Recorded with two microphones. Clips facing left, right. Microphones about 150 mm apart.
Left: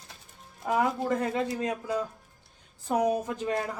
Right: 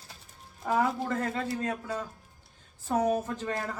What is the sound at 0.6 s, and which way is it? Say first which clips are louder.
Speech: left 1 dB; 15° left (ahead or behind).